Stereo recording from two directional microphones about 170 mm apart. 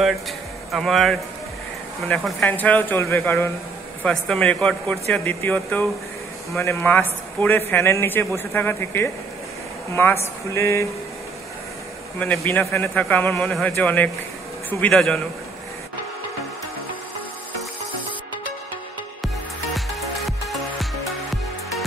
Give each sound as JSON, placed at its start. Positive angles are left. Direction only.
{"t": 0.7, "sound": "a man's voice", "side_deg": 0}
{"t": 12.2, "sound": "a man's voice", "side_deg": 10}